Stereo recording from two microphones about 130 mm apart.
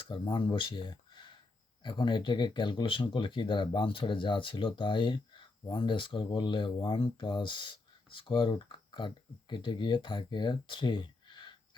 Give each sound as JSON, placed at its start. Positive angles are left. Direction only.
{"t": 0.0, "sound": "speech", "side_deg": 40}